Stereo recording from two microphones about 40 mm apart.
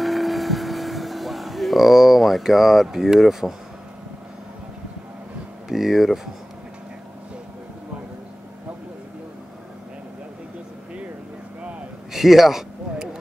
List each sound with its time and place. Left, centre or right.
0.0 s vehicle: centre
5.7 s speech: centre
12.1 s speech: centre